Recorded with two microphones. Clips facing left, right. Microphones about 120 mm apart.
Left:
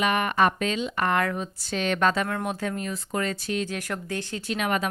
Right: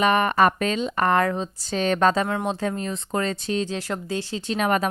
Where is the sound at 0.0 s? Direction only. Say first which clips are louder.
Right 4 dB; 35° right (ahead or behind).